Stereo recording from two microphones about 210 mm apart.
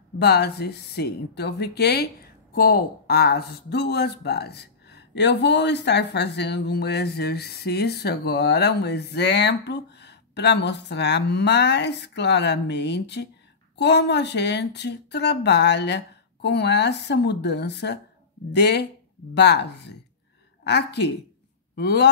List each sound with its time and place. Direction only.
0.2 s speech: 50° left (ahead or behind)